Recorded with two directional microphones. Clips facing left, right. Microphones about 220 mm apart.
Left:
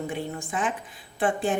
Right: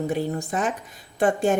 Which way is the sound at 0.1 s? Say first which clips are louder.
Right 6 dB; 40° right (ahead or behind).